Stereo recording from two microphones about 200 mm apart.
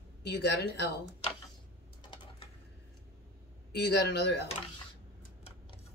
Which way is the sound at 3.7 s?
55° left (ahead or behind).